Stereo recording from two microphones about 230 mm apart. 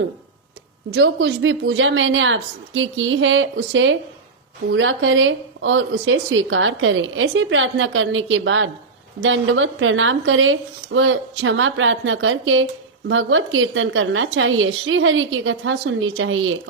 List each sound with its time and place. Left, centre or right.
0.9 s a woman's voice: right